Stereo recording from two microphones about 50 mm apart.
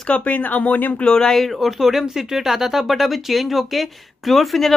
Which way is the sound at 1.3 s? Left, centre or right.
Centre.